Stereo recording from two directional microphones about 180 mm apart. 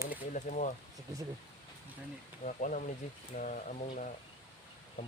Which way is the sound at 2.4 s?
45° left (ahead or behind).